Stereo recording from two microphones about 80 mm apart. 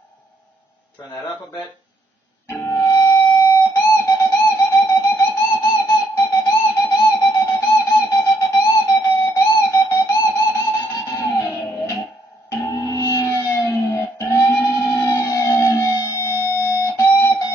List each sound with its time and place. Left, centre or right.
2.6 s music: left
11.4 s a sound: left
12.6 s music: left